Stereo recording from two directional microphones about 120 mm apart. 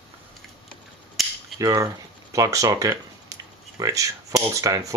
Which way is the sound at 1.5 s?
30° right (ahead or behind).